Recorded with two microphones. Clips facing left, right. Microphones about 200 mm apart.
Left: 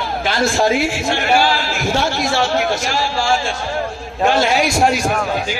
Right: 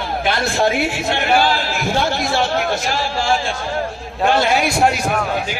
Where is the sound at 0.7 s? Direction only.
60° right (ahead or behind).